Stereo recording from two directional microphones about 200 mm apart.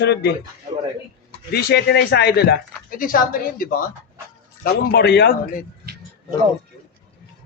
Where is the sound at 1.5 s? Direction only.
55° left (ahead or behind).